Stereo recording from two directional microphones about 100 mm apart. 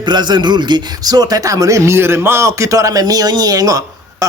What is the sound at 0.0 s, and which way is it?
Speech, 45° right (ahead or behind).